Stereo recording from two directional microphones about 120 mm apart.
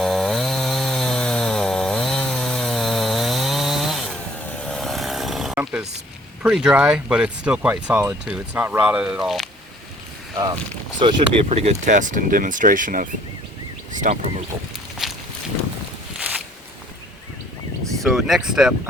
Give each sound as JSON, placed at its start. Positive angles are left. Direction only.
{"t": 0.0, "sound": "chainsaw", "side_deg": 0}
{"t": 4.4, "sound": "vehicle", "side_deg": 10}
{"t": 6.4, "sound": "speech", "side_deg": -10}
{"t": 10.3, "sound": "speech", "side_deg": -35}
{"t": 11.0, "sound": "speech", "side_deg": -45}
{"t": 11.4, "sound": "speech", "side_deg": -60}
{"t": 14.0, "sound": "speech", "side_deg": -70}
{"t": 15.0, "sound": "walk", "side_deg": 0}
{"t": 16.1, "sound": "a sound", "side_deg": -10}
{"t": 18.0, "sound": "speech", "side_deg": 0}